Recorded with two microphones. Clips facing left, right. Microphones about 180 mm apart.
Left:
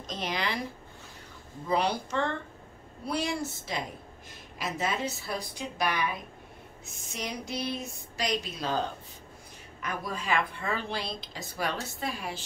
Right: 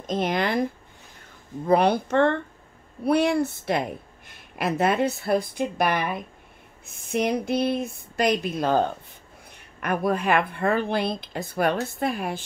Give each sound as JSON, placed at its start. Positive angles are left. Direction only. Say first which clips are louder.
{"t": 0.0, "sound": "speech", "louder": "right 9 dB", "side_deg": -50}
{"t": 1.7, "sound": "speech", "louder": "right 9 dB", "side_deg": -55}